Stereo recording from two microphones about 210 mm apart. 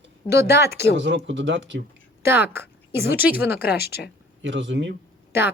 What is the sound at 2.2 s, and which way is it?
Speech, 10° right (ahead or behind).